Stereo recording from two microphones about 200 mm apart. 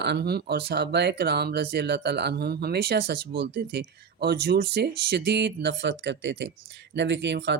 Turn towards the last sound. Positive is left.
turn(degrees=-60)  # may be behind; listen again after turning